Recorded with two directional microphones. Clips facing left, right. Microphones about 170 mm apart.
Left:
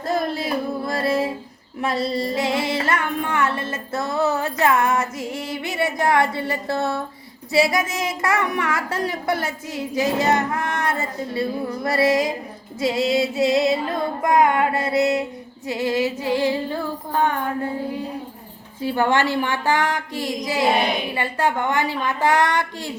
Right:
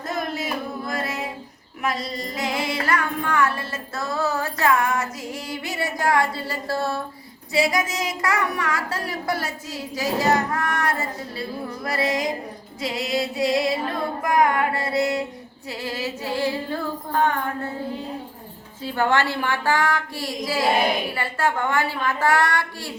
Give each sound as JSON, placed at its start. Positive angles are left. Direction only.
{"t": 0.1, "sound": "music", "side_deg": 30}
{"t": 1.8, "sound": "female singing", "side_deg": 30}
{"t": 17.1, "sound": "music", "side_deg": 15}
{"t": 18.8, "sound": "female singing", "side_deg": 15}